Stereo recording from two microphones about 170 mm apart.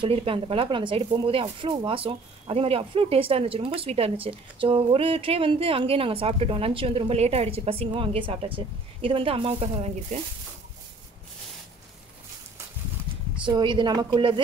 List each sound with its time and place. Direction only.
0.0 s speech: 30° right (ahead or behind)
13.5 s a woman's voice: 30° right (ahead or behind)